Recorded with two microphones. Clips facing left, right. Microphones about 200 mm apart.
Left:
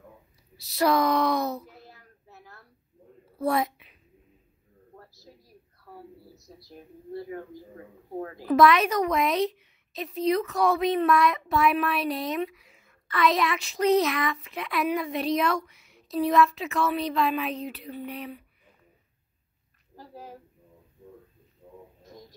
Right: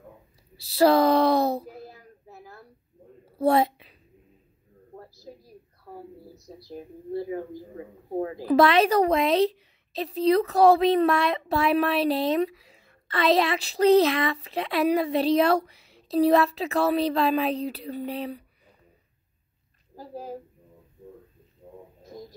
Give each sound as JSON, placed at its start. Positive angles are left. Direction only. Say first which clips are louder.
{"t": 0.6, "sound": "speech", "louder": "right 5 dB", "side_deg": -30}
{"t": 3.3, "sound": "a sound", "louder": "right 5 dB", "side_deg": -30}
{"t": 6.7, "sound": "a woman's voice", "louder": "right 6 dB", "side_deg": -30}
{"t": 7.2, "sound": "speech", "louder": "right 5 dB", "side_deg": -20}
{"t": 8.4, "sound": "a woman's voice", "louder": "right 1 dB", "side_deg": -35}
{"t": 20.0, "sound": "a woman's voice", "louder": "right 7 dB", "side_deg": -35}